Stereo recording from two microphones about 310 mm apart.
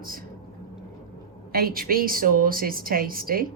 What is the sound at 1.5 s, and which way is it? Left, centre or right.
A woman's voice, right.